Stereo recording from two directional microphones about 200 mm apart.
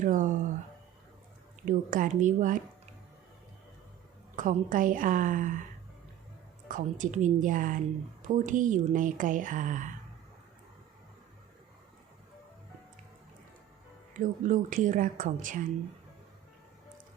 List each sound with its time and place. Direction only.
0.0 s a sound: 40° right (ahead or behind)
1.6 s speech: 40° right (ahead or behind)
4.4 s speech: 40° right (ahead or behind)
6.7 s speech: 40° right (ahead or behind)
14.2 s speech: 40° right (ahead or behind)